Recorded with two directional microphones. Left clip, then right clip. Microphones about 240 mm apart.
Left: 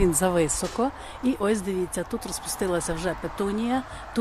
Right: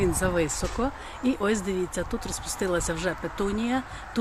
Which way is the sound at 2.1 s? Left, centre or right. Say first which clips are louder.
Left 1 dB; left.